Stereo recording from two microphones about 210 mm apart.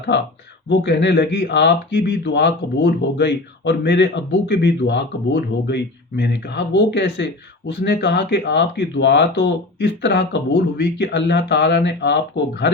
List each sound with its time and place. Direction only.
0.7 s speech: 55° left (ahead or behind)